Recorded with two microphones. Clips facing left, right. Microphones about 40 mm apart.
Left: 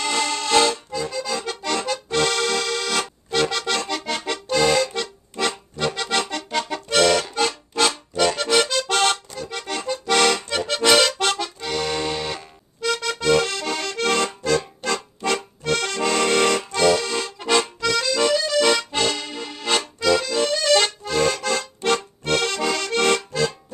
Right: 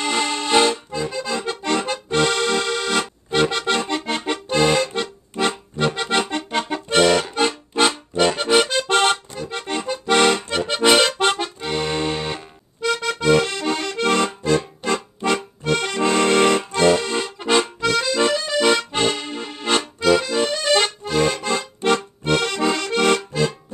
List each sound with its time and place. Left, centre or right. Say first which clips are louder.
0.0 s accordion: right 1 dB; centre